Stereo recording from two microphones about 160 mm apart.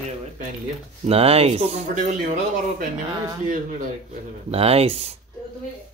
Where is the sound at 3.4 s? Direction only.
50° right (ahead or behind).